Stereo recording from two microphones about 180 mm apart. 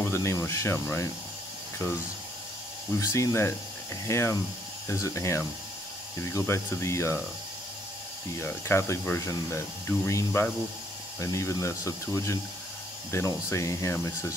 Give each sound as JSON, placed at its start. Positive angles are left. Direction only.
{"t": 0.0, "sound": "speech", "side_deg": 15}
{"t": 3.0, "sound": "speech", "side_deg": 20}
{"t": 8.4, "sound": "speech", "side_deg": 15}